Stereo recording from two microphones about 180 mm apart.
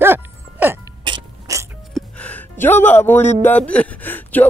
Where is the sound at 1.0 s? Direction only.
20° right (ahead or behind).